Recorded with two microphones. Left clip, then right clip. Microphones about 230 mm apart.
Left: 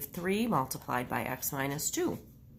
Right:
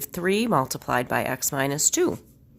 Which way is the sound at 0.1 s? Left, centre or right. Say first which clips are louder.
Right 9 dB; right.